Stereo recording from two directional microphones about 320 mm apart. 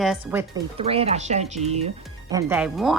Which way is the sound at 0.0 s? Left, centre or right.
Centre.